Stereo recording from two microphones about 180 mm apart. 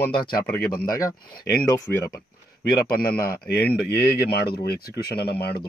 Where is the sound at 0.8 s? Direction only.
20° left (ahead or behind).